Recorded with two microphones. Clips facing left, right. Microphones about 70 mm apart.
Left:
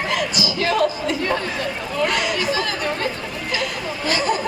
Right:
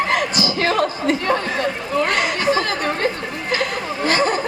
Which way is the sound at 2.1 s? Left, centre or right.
Right.